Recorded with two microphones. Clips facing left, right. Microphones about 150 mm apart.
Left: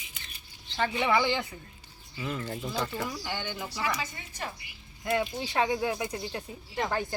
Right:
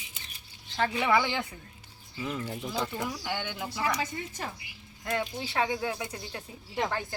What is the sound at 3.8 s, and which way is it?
Speech, 45° right (ahead or behind).